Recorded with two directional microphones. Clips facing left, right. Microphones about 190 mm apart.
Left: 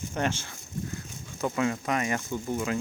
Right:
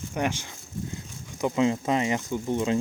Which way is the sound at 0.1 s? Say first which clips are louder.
Right 2 dB; 15° right (ahead or behind).